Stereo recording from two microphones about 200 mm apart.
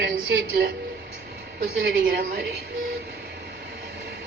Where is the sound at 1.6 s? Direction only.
50° right (ahead or behind).